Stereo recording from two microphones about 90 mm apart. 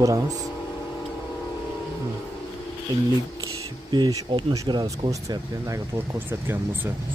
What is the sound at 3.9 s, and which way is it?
Speech, 55° right (ahead or behind).